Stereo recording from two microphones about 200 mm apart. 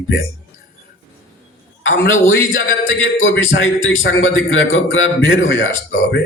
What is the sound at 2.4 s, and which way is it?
A man's voice, 80° left.